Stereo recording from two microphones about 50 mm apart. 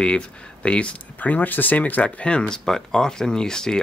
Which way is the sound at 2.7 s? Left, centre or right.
Centre.